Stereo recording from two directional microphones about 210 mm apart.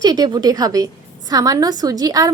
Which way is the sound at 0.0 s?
20° right (ahead or behind).